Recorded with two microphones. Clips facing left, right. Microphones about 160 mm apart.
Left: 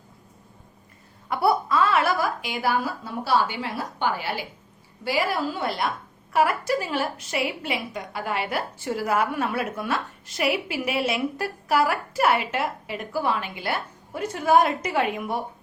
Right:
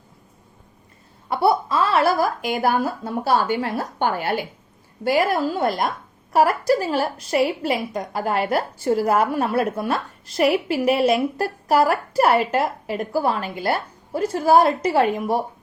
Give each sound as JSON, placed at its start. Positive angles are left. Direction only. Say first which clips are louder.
{"t": 1.3, "sound": "a woman's voice", "louder": "right 3 dB", "side_deg": -25}